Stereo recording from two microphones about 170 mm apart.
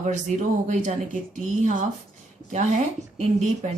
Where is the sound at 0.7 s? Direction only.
45° right (ahead or behind).